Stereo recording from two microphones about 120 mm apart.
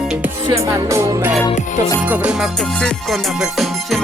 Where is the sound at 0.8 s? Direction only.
25° right (ahead or behind).